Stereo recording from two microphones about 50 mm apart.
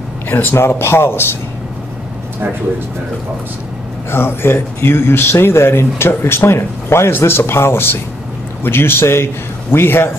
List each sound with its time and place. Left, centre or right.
0.3 s speech: left
4.1 s speech: left